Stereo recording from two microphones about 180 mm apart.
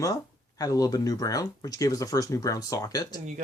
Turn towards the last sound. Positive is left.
turn(degrees=20)  # may be behind; listen again after turning